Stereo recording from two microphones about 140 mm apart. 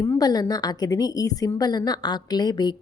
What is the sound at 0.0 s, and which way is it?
A woman's voice, 25° left (ahead or behind).